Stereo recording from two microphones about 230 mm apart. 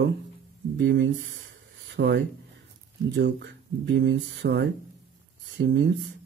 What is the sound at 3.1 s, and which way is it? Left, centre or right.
Speech, right.